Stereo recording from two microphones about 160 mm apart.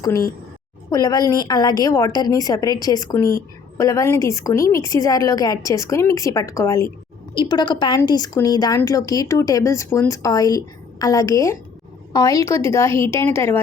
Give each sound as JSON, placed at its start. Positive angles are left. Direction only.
{"t": 0.9, "sound": "a woman's voice", "side_deg": 25}